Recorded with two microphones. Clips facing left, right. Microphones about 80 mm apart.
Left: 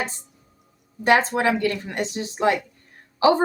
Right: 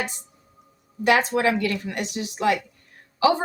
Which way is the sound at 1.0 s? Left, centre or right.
Left.